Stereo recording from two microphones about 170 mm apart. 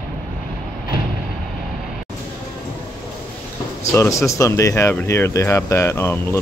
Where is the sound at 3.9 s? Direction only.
15° left (ahead or behind).